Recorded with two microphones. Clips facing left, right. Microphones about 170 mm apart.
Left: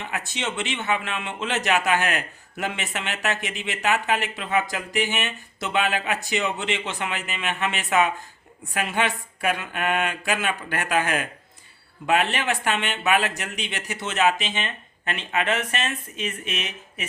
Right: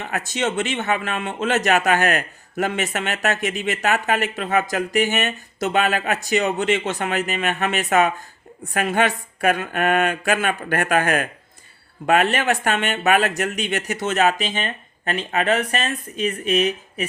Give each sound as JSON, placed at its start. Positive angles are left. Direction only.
{"t": 0.0, "sound": "a man's voice", "side_deg": -45}